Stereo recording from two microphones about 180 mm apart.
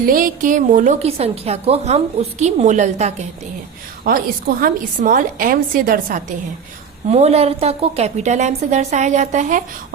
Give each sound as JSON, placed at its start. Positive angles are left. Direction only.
{"t": 0.0, "sound": "a woman's voice", "side_deg": -50}
{"t": 4.0, "sound": "a woman's voice", "side_deg": -55}
{"t": 7.1, "sound": "a woman's voice", "side_deg": -35}